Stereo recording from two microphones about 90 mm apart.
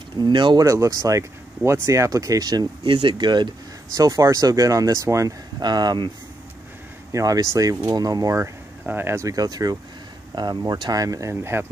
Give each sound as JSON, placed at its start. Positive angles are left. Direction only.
{"t": 0.2, "sound": "speech", "side_deg": -60}
{"t": 0.6, "sound": "speech", "side_deg": -35}
{"t": 2.8, "sound": "speech", "side_deg": -70}
{"t": 3.9, "sound": "speech", "side_deg": -40}
{"t": 5.6, "sound": "speech", "side_deg": -50}
{"t": 7.1, "sound": "speech", "side_deg": -40}
{"t": 8.8, "sound": "speech", "side_deg": -25}
{"t": 9.3, "sound": "speech", "side_deg": -45}